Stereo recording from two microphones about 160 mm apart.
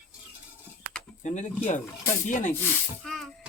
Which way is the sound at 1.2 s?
45° left (ahead or behind).